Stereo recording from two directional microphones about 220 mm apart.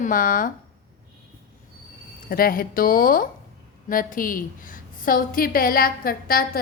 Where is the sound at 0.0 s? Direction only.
40° left (ahead or behind).